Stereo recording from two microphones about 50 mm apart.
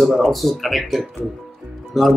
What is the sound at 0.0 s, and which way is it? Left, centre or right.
Speech, centre.